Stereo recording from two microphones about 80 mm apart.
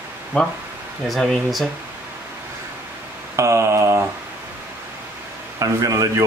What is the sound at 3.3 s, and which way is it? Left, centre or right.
Mantra, right.